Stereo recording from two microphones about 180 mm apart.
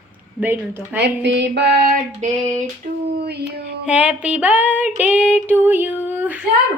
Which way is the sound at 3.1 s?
60° right (ahead or behind).